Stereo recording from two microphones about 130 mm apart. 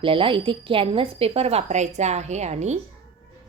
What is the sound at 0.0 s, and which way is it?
A woman's voice, 45° right (ahead or behind).